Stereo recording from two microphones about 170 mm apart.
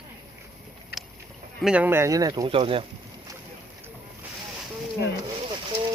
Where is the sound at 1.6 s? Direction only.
5° right (ahead or behind); by 2.9 s 30° right (ahead or behind).